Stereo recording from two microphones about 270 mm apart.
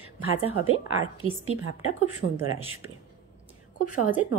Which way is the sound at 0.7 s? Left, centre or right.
Right.